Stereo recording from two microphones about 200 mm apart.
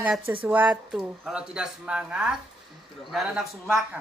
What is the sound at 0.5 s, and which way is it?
Speech, 5° right (ahead or behind).